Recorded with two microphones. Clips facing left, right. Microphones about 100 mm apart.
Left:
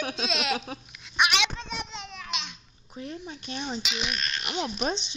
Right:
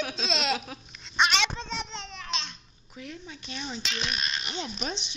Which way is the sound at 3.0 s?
35° left (ahead or behind).